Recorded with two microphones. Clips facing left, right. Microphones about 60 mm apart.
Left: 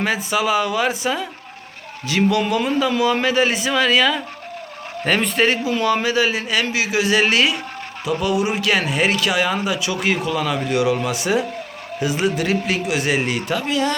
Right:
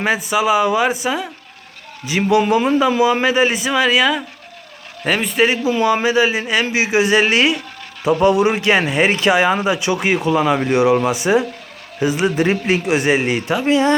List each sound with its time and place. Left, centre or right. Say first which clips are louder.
0.0 s speech: right 3 dB; centre
2.3 s a man's voice: right 5 dB; centre
5.6 s speech: right 3 dB; centre